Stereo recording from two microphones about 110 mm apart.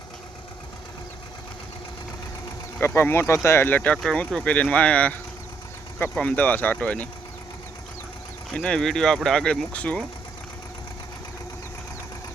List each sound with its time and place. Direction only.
2.8 s speech: 20° left (ahead or behind)
6.1 s speech: 15° left (ahead or behind)
8.5 s speech: 5° left (ahead or behind)